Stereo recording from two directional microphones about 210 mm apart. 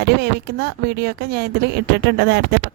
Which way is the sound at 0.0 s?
50° right (ahead or behind).